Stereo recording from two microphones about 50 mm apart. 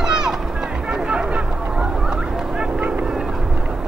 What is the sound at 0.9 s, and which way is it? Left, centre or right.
Music, centre.